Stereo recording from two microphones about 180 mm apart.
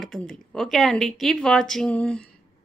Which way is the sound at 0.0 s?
5° left (ahead or behind).